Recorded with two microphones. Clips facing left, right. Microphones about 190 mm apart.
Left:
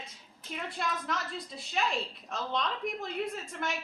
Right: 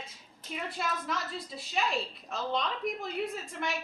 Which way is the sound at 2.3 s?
5° right (ahead or behind).